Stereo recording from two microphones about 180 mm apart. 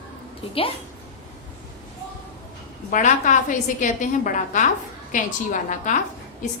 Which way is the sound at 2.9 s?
45° left (ahead or behind).